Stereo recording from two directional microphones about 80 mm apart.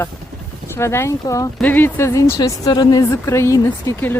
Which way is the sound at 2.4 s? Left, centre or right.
Left.